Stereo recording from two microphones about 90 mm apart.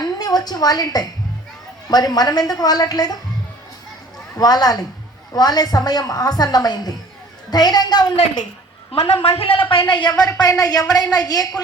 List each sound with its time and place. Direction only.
0.0 s a woman's voice: 45° left (ahead or behind)
4.4 s a woman's voice: 45° left (ahead or behind)
8.9 s a woman's voice: 90° left; by 11.6 s 45° left (ahead or behind)